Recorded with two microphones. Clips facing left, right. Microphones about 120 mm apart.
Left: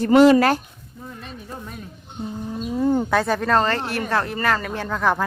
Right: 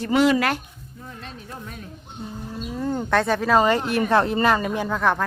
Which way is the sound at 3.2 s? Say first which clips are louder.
Right 1 dB; centre (ahead or behind).